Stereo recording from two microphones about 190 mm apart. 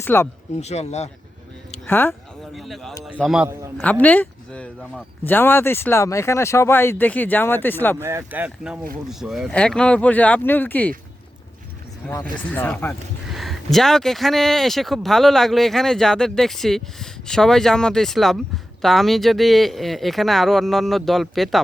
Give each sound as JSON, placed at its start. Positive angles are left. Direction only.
{"t": 0.0, "sound": "speech", "side_deg": 10}
{"t": 0.6, "sound": "speech", "side_deg": 35}
{"t": 1.9, "sound": "speech", "side_deg": 10}
{"t": 2.5, "sound": "speech", "side_deg": 0}
{"t": 3.8, "sound": "speech", "side_deg": 10}
{"t": 7.9, "sound": "speech", "side_deg": -15}
{"t": 12.0, "sound": "speech", "side_deg": 5}